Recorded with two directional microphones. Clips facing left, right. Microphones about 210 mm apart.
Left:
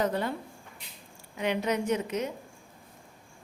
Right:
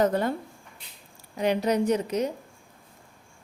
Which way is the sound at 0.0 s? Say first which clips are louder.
Right 5 dB; 45° right (ahead or behind).